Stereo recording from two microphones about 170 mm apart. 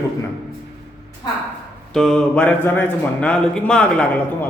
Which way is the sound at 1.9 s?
Centre (ahead or behind).